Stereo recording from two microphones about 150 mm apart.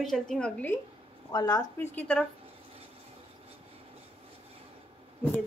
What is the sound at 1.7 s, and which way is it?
Speech, 10° left (ahead or behind).